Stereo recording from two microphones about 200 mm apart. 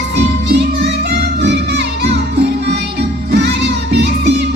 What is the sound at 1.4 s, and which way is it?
Music, 60° right (ahead or behind).